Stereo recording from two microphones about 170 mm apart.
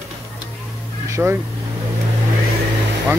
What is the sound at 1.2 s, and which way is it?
Speech, 5° right (ahead or behind).